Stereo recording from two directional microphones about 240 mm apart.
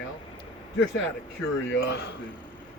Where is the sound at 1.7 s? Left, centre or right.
Left.